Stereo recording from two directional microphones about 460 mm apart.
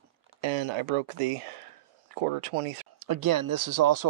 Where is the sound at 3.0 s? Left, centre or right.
Right.